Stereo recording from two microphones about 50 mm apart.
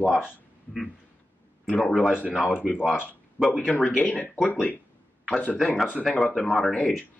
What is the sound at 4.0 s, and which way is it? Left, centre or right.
Speech, left.